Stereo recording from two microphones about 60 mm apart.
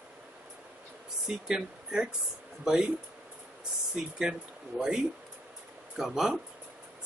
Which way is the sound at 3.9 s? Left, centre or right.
Centre.